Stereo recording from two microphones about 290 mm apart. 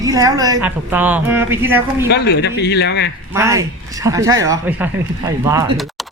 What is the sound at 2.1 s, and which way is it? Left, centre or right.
Speech, left.